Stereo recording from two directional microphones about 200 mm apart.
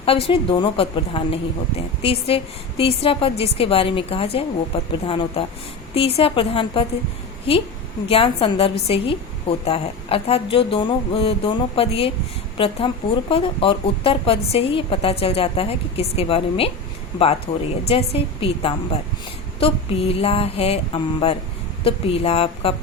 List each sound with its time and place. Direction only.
0.0 s a woman's voice: 30° left (ahead or behind)
8.0 s a woman's voice: 30° left (ahead or behind)